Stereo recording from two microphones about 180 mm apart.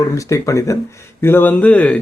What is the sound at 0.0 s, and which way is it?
Speech, 15° left (ahead or behind).